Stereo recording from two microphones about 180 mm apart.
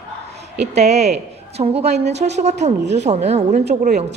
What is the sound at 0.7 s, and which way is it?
A woman's voice, 40° right (ahead or behind).